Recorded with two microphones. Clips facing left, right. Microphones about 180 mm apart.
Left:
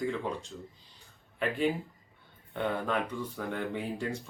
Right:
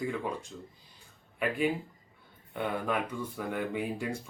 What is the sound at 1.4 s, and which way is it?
Speech, 10° right (ahead or behind).